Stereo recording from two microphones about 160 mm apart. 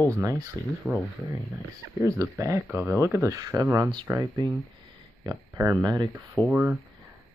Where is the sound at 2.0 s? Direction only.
20° right (ahead or behind).